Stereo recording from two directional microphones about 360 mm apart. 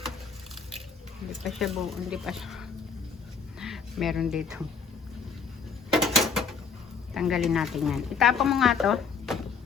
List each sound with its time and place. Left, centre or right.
1.5 s speech: centre
5.9 s a sound: centre
7.1 s speech: centre